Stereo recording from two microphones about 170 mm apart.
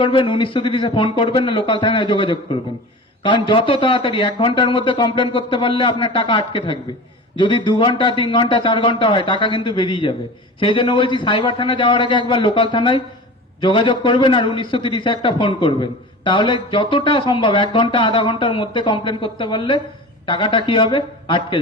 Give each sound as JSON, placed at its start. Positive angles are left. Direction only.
{"t": 0.0, "sound": "a man's voice", "side_deg": 30}